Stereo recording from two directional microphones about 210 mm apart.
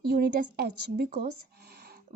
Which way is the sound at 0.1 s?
50° right (ahead or behind).